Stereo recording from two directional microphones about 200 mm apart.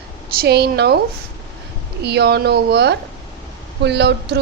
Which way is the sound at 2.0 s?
55° right (ahead or behind).